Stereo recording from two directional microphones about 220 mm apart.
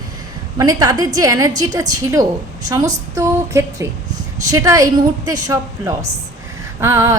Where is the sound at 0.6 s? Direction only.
15° right (ahead or behind).